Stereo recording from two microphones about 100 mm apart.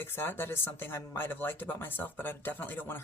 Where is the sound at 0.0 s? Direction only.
20° left (ahead or behind).